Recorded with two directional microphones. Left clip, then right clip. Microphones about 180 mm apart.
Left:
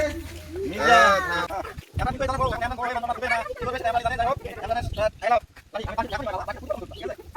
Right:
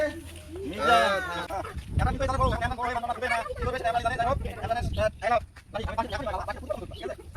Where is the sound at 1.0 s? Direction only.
25° left (ahead or behind).